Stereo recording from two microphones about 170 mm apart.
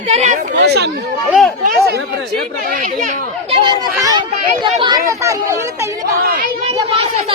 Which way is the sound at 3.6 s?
25° right (ahead or behind).